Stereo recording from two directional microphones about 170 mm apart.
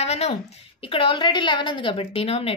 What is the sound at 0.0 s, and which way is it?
A woman's voice, 40° left (ahead or behind).